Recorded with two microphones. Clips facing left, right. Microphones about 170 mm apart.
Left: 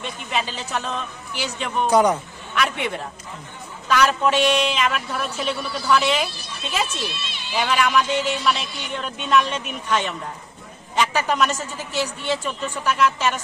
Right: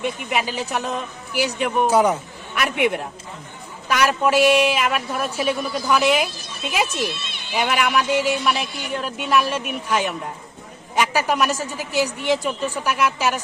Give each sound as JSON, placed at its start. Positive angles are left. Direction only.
{"t": 0.0, "sound": "a woman's voice", "side_deg": -10}
{"t": 7.1, "sound": "speech", "side_deg": -55}
{"t": 7.5, "sound": "a woman's voice", "side_deg": -10}